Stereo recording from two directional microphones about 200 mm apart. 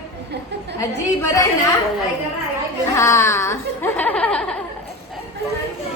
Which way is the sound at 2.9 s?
15° left (ahead or behind).